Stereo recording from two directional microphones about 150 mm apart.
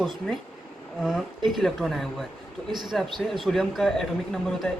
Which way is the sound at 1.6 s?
Centre (ahead or behind).